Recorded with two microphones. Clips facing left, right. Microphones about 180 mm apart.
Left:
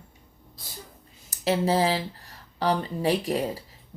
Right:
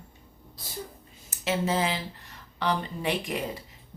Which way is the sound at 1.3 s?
35° left (ahead or behind).